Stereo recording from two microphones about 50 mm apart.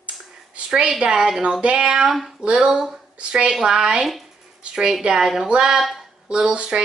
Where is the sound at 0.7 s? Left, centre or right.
Centre.